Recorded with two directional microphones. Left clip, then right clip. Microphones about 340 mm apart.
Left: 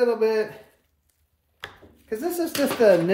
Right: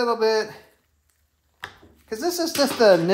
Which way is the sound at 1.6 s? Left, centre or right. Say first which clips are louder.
Right 1 dB; centre.